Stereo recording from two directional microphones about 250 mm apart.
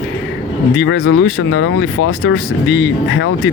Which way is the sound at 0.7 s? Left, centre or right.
Left.